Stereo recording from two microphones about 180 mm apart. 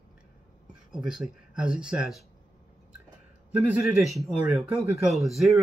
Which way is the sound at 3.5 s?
10° right (ahead or behind).